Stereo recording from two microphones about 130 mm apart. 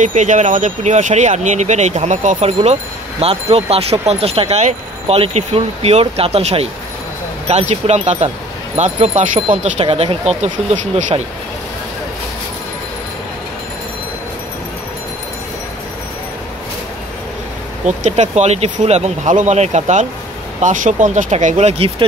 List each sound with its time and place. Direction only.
0.0 s speech: 70° right (ahead or behind); by 10.5 s 55° right (ahead or behind)
11.0 s speech: 70° right (ahead or behind)
17.8 s speech: 65° right (ahead or behind)